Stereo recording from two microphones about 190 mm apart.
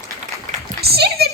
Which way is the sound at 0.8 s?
55° right (ahead or behind).